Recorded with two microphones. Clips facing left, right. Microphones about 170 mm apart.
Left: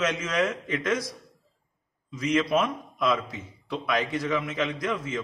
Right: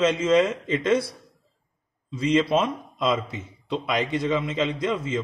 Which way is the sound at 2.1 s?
25° right (ahead or behind).